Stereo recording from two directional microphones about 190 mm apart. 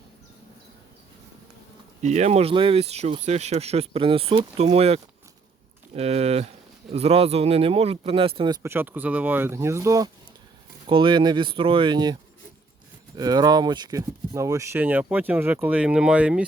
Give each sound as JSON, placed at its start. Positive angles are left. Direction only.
{"t": 2.0, "sound": "speech", "side_deg": -35}
{"t": 8.6, "sound": "speech", "side_deg": -10}
{"t": 13.1, "sound": "speech", "side_deg": -20}